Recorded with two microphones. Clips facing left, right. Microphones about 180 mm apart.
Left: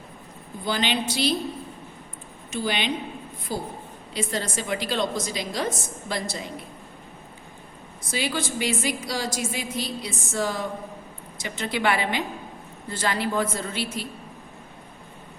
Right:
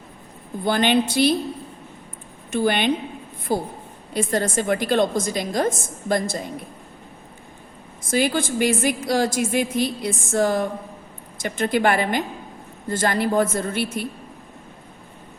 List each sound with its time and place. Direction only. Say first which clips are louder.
0.6 s a woman's voice: right 7 dB; 55° right (ahead or behind)
2.5 s a woman's voice: right 7 dB; 55° right (ahead or behind)
8.1 s a woman's voice: right 7 dB; 50° right (ahead or behind)